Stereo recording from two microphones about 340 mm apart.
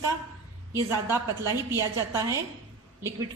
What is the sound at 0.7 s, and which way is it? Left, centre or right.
Speech, centre.